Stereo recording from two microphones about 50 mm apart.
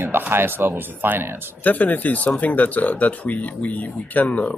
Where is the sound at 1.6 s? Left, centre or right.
Left.